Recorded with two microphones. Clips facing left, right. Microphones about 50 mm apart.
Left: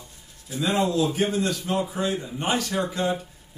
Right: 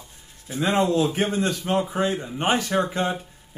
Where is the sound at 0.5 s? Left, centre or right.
Right.